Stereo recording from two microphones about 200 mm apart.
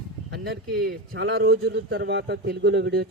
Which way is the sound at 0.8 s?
55° right (ahead or behind).